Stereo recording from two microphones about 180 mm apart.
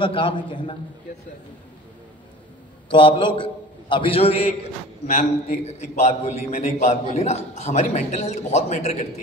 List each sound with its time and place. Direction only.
0.0 s a man's voice: 25° left (ahead or behind)
2.9 s a man's voice: 30° left (ahead or behind)
5.0 s a man's voice: 45° left (ahead or behind)